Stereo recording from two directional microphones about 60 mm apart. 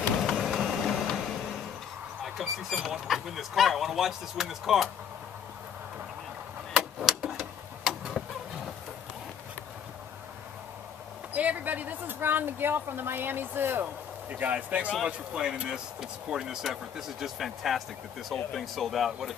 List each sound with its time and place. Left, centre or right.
0.2 s vehicle: centre
2.2 s speech: centre
6.7 s a sound: centre
11.3 s speech: right
14.3 s speech: right; by 19.3 s centre